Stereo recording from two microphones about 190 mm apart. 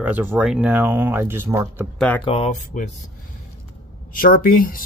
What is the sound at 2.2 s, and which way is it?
Speech, 30° left (ahead or behind).